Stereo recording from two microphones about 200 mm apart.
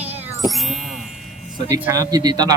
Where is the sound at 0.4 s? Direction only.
Centre (ahead or behind).